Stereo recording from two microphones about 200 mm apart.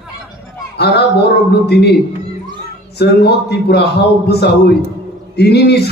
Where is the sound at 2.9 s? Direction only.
55° left (ahead or behind).